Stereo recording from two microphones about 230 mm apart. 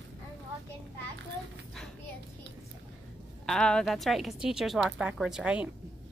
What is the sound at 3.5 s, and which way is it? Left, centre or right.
Speech, centre.